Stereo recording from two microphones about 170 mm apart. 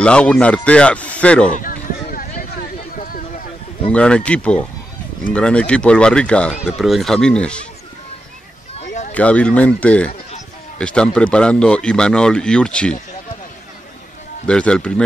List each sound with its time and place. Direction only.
0.0 s speech: 5° left (ahead or behind)
1.5 s a sound: 55° left (ahead or behind)
3.9 s speech: 5° left (ahead or behind)
8.7 s a sound: 45° left (ahead or behind)
9.1 s speech: 10° left (ahead or behind)
14.5 s speech: 5° left (ahead or behind)